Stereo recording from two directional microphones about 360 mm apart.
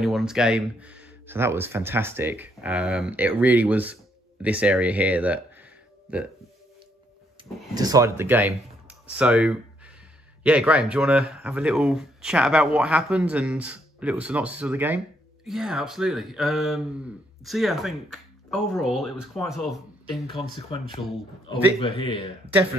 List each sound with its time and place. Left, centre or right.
0.0 s speech: centre
7.4 s a sound: centre
7.7 s speech: centre
20.5 s a man's voice: centre